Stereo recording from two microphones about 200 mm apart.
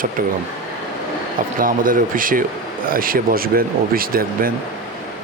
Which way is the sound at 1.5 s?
45° right (ahead or behind).